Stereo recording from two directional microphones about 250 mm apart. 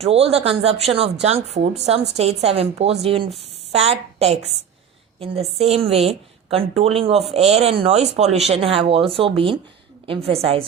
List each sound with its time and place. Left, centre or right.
0.0 s a woman's voice: right